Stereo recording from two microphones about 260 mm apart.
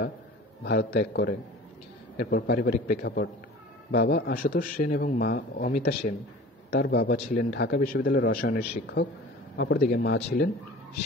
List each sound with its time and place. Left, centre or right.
0.7 s a man's voice: left